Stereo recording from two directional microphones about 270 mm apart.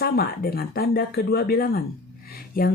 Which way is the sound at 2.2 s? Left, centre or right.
Left.